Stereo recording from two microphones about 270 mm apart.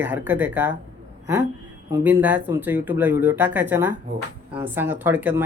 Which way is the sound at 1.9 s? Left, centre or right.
Centre.